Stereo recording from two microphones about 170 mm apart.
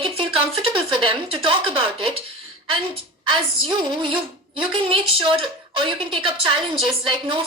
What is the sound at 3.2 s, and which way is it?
A woman's voice, 25° right (ahead or behind).